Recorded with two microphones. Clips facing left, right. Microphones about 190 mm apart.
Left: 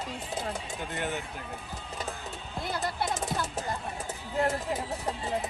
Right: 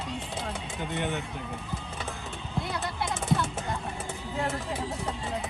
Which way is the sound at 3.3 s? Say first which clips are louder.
Right 4 dB; 35° left (ahead or behind).